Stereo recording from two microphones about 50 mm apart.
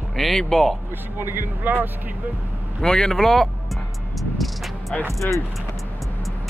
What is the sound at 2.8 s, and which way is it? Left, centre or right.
Speech, centre.